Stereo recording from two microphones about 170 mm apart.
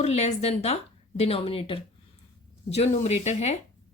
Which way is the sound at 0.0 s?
40° left (ahead or behind).